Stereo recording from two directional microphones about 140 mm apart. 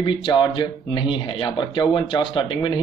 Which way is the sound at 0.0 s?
35° left (ahead or behind).